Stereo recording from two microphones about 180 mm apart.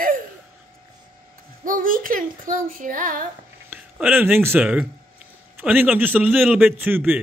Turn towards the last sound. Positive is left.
turn(degrees=-10)  # may be behind; listen again after turning